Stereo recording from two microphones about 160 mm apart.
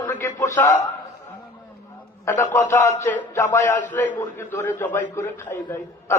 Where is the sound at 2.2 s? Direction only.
20° left (ahead or behind).